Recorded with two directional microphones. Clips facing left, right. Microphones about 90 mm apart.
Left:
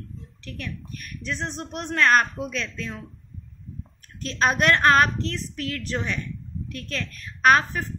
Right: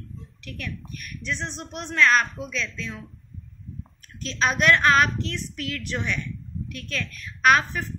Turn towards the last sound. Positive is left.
turn(degrees=35)  # may be behind; listen again after turning